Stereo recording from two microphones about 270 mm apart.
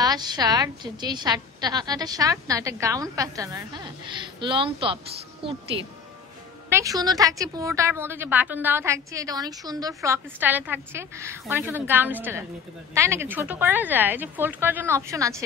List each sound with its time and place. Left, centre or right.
0.0 s a woman's voice: centre
6.7 s a woman's voice: centre